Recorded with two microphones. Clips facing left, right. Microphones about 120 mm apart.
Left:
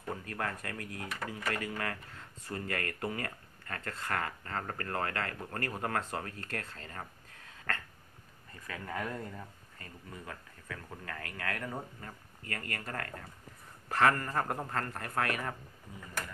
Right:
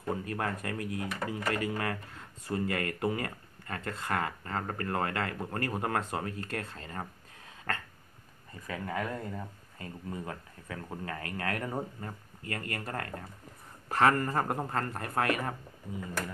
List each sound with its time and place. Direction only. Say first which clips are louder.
0.0 s speech: right 4 dB; 20° right (ahead or behind)
8.6 s speech: right 4 dB; 10° right (ahead or behind)
10.0 s speech: right 7 dB; 25° right (ahead or behind)